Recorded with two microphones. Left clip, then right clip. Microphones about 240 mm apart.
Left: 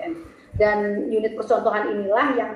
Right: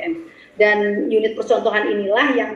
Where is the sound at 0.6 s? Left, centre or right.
Right.